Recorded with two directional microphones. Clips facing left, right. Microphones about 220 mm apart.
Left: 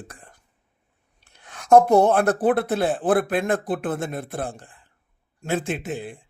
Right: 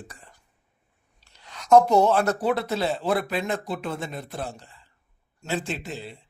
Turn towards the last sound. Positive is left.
turn(degrees=50)  # may be behind; listen again after turning